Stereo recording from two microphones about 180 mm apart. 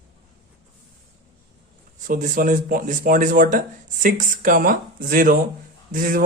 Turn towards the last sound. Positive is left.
turn(degrees=-50)  # may be behind; listen again after turning